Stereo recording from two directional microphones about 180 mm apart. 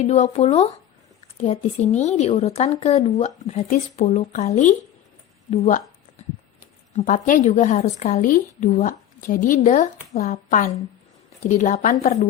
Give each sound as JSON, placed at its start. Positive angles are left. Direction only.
{"t": 0.0, "sound": "a woman's voice", "side_deg": 40}
{"t": 6.9, "sound": "a woman's voice", "side_deg": 45}